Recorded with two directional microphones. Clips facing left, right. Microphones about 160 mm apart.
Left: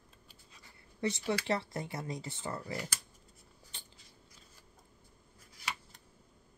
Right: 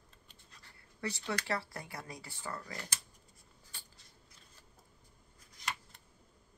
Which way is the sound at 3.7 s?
20° left (ahead or behind).